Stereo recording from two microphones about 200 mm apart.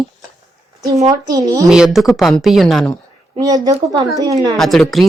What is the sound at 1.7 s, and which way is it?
A woman's voice, centre (ahead or behind).